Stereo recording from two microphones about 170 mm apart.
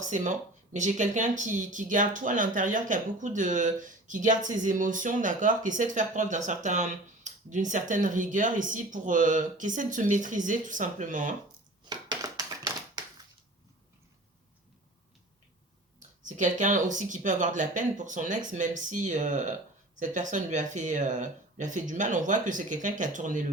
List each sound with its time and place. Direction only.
0.0 s speech: 45° right (ahead or behind)
11.9 s a sound: 25° right (ahead or behind)
16.0 s speech: 50° right (ahead or behind)